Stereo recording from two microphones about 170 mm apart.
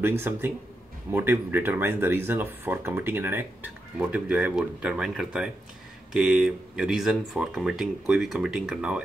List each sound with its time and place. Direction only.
1.1 s speech: 10° right (ahead or behind)